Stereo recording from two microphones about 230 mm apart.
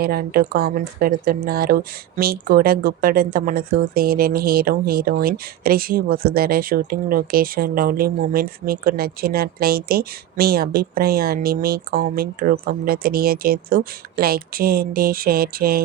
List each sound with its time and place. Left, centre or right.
0.0 s speech: right